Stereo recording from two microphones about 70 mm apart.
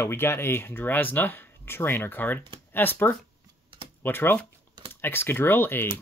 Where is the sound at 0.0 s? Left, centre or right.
Left.